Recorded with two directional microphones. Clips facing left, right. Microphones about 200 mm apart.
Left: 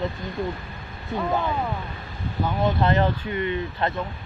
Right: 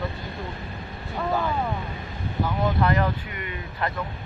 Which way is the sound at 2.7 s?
25° left (ahead or behind).